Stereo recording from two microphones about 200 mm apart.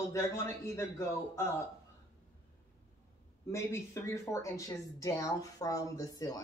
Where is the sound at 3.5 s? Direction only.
15° left (ahead or behind).